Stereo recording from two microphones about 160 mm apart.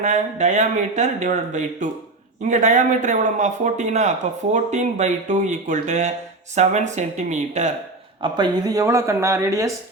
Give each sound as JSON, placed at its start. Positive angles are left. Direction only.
{"t": 0.0, "sound": "speech", "side_deg": -50}
{"t": 8.2, "sound": "speech", "side_deg": -25}